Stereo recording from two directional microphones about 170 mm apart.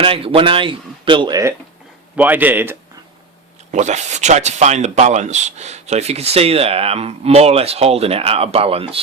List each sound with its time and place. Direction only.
0.0 s speech: 30° right (ahead or behind)
2.1 s speech: 10° right (ahead or behind)
3.7 s speech: 45° right (ahead or behind)